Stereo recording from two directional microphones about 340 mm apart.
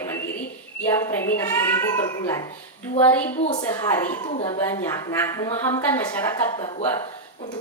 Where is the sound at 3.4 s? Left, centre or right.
Centre.